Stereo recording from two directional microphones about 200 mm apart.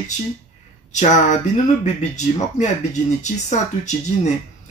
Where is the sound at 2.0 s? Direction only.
35° left (ahead or behind).